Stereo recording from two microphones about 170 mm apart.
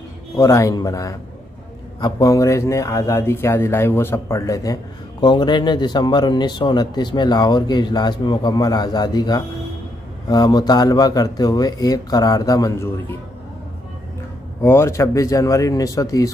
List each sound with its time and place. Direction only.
0.4 s speech: 20° left (ahead or behind)
14.6 s speech: 15° left (ahead or behind)